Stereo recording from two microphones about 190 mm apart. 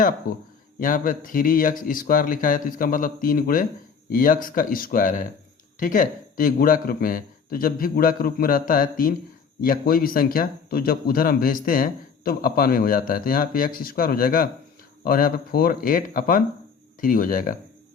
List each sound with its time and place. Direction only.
0.3 s speech: 45° left (ahead or behind)